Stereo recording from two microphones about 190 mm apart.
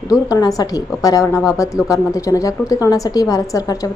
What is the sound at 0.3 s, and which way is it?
A woman's voice, 20° left (ahead or behind).